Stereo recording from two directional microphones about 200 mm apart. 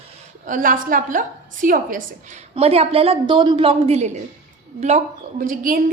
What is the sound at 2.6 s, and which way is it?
A woman's voice, 30° right (ahead or behind).